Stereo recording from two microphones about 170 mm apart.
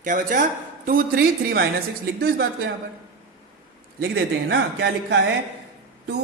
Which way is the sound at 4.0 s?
75° right (ahead or behind).